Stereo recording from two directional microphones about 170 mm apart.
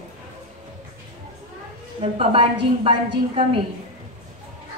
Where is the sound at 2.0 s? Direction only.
30° right (ahead or behind).